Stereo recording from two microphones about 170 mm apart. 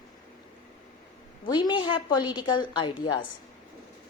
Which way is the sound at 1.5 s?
25° left (ahead or behind).